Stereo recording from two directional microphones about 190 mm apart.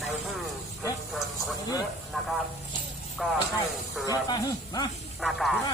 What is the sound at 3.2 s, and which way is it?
Speech, centre (ahead or behind).